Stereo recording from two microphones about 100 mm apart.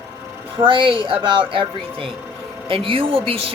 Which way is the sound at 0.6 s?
55° right (ahead or behind).